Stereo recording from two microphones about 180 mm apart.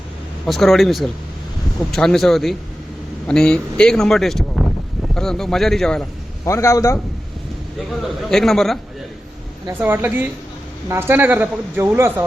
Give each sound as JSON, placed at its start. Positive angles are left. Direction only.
{"t": 0.4, "sound": "speech", "side_deg": 0}
{"t": 6.4, "sound": "a man's voice", "side_deg": 15}
{"t": 8.3, "sound": "speech", "side_deg": 0}
{"t": 9.6, "sound": "speech", "side_deg": -10}